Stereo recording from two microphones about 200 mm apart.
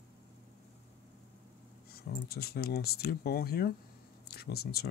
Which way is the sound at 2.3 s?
50° left (ahead or behind).